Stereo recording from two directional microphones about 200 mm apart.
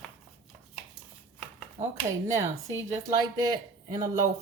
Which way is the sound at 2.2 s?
15° right (ahead or behind).